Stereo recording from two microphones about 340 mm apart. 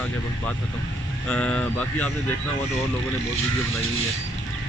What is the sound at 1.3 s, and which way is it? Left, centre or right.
Speech, centre.